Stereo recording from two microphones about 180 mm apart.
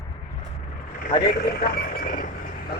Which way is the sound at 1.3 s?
55° left (ahead or behind).